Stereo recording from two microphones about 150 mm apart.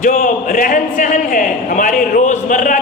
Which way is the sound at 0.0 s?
60° left (ahead or behind).